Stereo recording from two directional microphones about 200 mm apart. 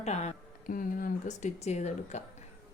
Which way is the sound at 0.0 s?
35° left (ahead or behind).